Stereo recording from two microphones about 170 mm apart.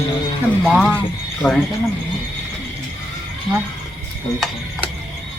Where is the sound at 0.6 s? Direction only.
5° right (ahead or behind).